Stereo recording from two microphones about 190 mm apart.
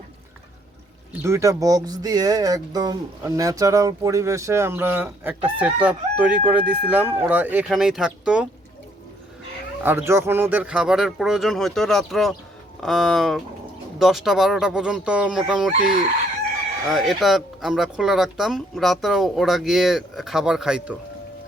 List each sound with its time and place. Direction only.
1.2 s speech: 15° right (ahead or behind)
9.8 s speech: 10° right (ahead or behind)
16.9 s speech: centre (ahead or behind)